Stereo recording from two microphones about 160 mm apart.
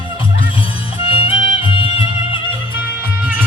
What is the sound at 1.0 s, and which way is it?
Music, 35° left (ahead or behind).